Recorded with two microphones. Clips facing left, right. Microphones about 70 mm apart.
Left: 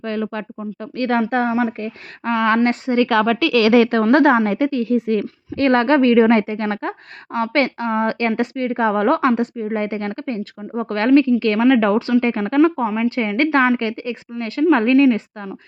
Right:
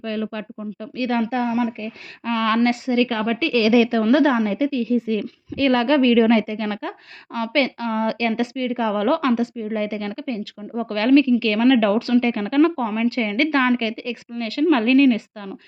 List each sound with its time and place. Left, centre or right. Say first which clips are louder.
0.0 s a woman's voice: left 3 dB; left
2.3 s a woman's voice: left 3 dB; left
2.6 s a woman's voice: left 2 dB; left
3.1 s a woman's voice: left 5 dB; left
5.5 s a woman's voice: left 3 dB; left
11.6 s a woman's voice: left 1 dB; left
13.1 s a woman's voice: left 2 dB; left